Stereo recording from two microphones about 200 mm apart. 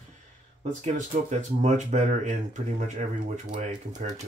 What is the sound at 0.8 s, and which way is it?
Speech, 35° right (ahead or behind).